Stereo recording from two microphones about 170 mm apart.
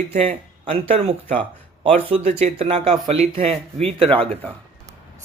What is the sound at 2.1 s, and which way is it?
Speech, 40° right (ahead or behind).